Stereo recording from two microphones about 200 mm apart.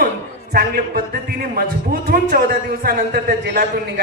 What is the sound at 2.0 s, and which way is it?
A man's voice, 45° right (ahead or behind).